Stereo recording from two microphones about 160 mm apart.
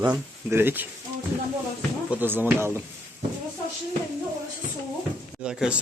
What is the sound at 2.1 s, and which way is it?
Speech, 10° right (ahead or behind).